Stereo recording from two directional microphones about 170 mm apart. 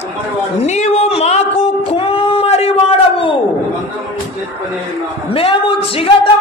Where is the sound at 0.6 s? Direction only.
40° left (ahead or behind).